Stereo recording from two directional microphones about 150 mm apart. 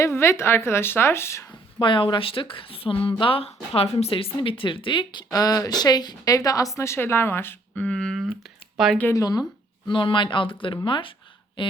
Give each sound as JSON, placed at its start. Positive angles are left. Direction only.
{"t": 0.0, "sound": "a woman's voice", "side_deg": 15}
{"t": 1.8, "sound": "speech", "side_deg": 35}
{"t": 9.1, "sound": "speech", "side_deg": 25}